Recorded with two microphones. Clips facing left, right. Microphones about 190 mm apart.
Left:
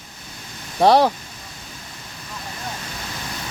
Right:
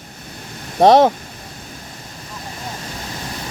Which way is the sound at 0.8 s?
20° right (ahead or behind).